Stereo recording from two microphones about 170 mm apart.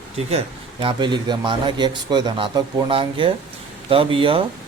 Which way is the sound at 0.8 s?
25° right (ahead or behind).